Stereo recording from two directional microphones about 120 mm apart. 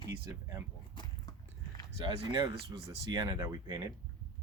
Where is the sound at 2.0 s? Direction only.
40° right (ahead or behind).